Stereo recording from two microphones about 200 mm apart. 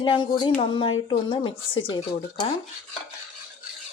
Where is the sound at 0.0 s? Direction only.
25° left (ahead or behind).